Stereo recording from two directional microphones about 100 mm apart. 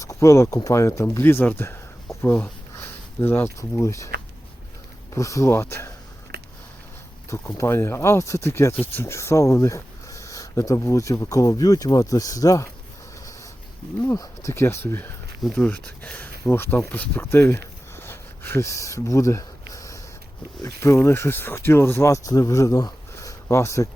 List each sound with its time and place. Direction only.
0.0 s speech: 30° left (ahead or behind)
5.1 s speech: 30° left (ahead or behind)
7.3 s speech: 25° left (ahead or behind)
14.2 s speech: 30° left (ahead or behind)
15.5 s speech: 15° left (ahead or behind)